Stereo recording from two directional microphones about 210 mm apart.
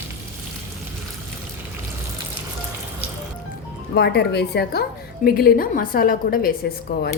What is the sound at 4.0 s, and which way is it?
A woman's voice, 50° left (ahead or behind).